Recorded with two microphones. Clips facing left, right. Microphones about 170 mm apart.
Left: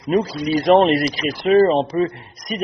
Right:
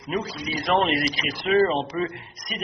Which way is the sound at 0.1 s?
45° left (ahead or behind).